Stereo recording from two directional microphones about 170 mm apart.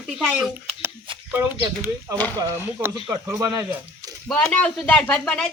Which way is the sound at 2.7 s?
15° right (ahead or behind).